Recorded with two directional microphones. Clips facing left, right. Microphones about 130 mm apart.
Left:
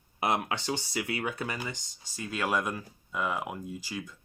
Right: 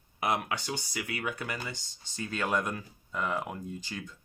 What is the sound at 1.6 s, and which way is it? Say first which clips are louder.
Speech: left 2 dB; 15° left (ahead or behind).